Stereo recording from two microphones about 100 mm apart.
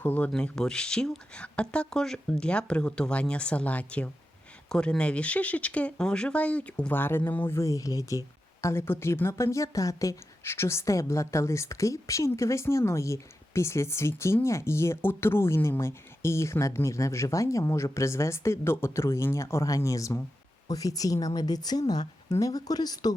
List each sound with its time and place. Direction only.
0.0 s speech: 20° left (ahead or behind)
0.3 s a woman's voice: 5° left (ahead or behind); by 23.1 s 40° left (ahead or behind)